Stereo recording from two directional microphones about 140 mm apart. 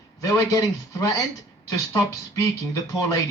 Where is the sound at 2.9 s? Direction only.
25° left (ahead or behind).